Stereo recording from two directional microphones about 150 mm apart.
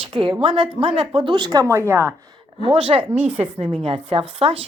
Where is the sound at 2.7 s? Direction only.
40° right (ahead or behind).